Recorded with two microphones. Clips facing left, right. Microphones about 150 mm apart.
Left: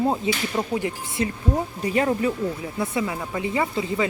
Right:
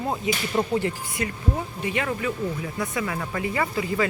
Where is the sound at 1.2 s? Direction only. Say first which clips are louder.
Left 4 dB; 35° left (ahead or behind).